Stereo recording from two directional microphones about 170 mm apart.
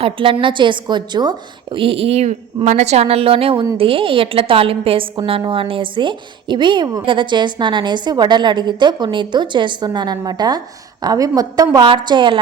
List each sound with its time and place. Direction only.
0.0 s a woman's voice: 30° right (ahead or behind)